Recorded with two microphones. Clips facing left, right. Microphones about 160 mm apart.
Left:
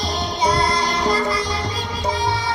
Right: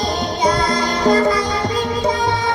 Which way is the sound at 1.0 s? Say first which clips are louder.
Right 9 dB; 50° right (ahead or behind).